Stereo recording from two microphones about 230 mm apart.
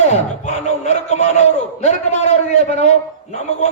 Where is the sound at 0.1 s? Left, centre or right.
Left.